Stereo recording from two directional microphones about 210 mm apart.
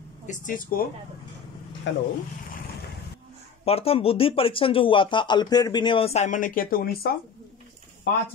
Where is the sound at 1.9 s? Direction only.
60° left (ahead or behind).